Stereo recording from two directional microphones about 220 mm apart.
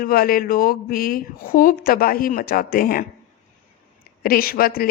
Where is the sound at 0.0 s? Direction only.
40° left (ahead or behind).